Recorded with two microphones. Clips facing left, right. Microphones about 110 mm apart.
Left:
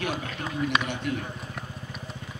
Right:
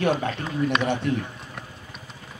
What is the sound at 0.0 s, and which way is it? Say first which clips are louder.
Speech: right 8 dB; 35° right (ahead or behind).